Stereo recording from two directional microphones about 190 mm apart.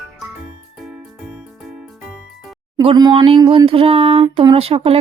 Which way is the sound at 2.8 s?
25° right (ahead or behind).